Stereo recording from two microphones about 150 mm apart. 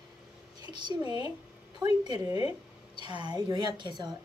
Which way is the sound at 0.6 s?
30° right (ahead or behind).